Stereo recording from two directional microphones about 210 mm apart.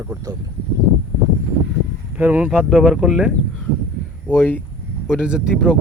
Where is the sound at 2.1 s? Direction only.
10° right (ahead or behind).